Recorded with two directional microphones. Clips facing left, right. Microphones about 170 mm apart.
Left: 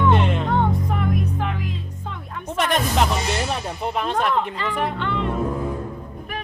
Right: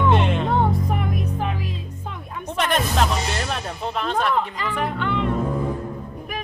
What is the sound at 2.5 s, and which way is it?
Music, 10° left (ahead or behind).